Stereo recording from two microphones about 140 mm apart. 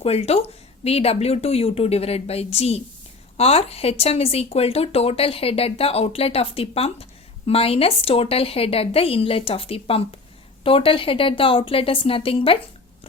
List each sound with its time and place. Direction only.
0.0 s a woman's voice: 45° left (ahead or behind)